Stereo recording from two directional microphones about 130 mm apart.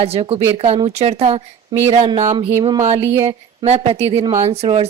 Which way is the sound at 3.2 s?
55° right (ahead or behind).